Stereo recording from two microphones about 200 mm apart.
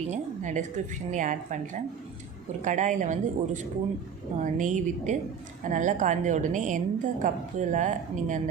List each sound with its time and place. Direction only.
0.1 s a woman's voice: 40° right (ahead or behind)
2.6 s a woman's voice: 40° right (ahead or behind)